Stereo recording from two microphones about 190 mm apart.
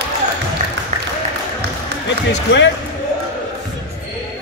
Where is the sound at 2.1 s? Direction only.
70° left (ahead or behind).